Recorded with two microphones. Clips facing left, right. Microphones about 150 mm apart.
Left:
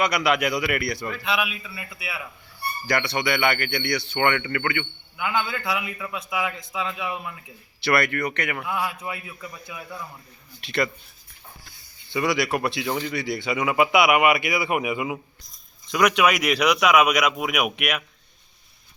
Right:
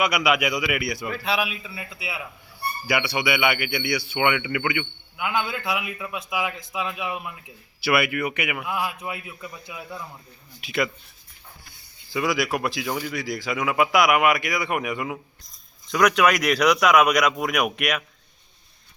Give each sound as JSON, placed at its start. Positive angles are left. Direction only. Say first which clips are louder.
{"t": 0.0, "sound": "speech", "louder": "even", "side_deg": -5}
{"t": 1.1, "sound": "a man's voice", "louder": "right 1 dB", "side_deg": -35}
{"t": 2.8, "sound": "speech", "louder": "even", "side_deg": -5}
{"t": 10.6, "sound": "speech", "louder": "even", "side_deg": -5}
{"t": 12.1, "sound": "speech", "louder": "left 1 dB", "side_deg": 0}